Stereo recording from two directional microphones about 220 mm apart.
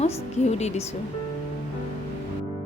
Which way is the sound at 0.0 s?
30° left (ahead or behind).